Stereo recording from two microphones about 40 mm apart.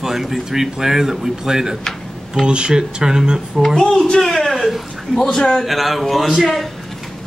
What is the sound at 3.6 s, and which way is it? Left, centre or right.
A woman's voice, centre.